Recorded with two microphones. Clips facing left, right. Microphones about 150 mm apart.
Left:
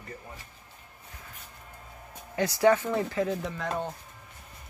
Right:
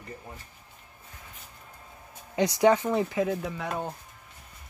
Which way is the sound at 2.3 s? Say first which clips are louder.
Right 1 dB; 20° right (ahead or behind).